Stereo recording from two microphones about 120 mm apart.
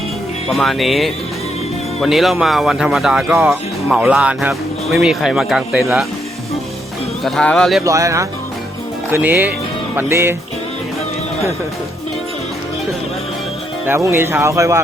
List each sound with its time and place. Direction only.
0.4 s speech: centre (ahead or behind)
7.3 s speech: 5° left (ahead or behind)
7.9 s speech: 25° right (ahead or behind)
9.1 s speech: 15° right (ahead or behind)
13.8 s speech: 20° right (ahead or behind)